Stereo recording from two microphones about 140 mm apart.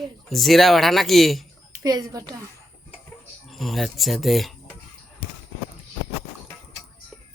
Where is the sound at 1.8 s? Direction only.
30° right (ahead or behind).